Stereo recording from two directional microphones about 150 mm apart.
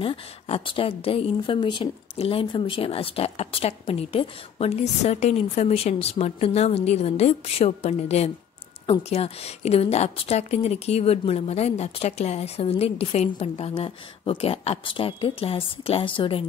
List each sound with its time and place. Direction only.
0.0 s a woman's voice: 35° left (ahead or behind)